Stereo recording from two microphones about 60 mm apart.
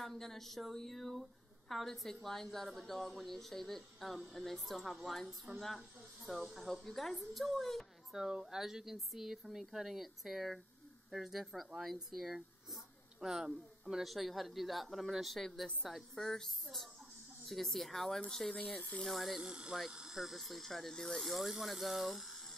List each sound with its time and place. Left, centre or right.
0.0 s speech: centre
8.2 s speech: centre
18.5 s speech: centre
19.0 s speech: centre